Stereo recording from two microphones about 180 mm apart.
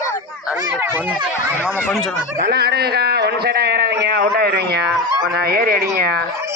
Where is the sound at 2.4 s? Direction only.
65° right (ahead or behind).